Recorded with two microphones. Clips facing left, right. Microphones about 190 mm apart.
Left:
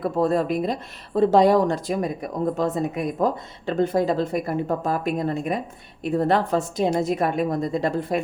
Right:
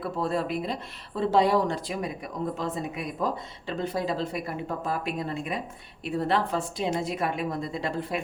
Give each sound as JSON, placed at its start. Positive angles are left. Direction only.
{"t": 0.0, "sound": "speech", "side_deg": 45}